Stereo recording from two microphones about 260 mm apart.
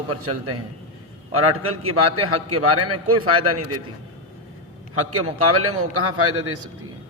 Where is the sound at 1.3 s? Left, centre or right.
Right.